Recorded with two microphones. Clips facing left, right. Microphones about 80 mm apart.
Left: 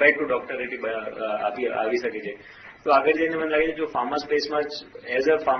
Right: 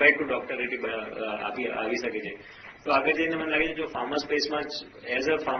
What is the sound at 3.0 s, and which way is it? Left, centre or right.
Speech, left.